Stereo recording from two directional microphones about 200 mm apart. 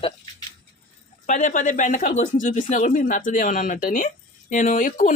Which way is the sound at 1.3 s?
40° left (ahead or behind).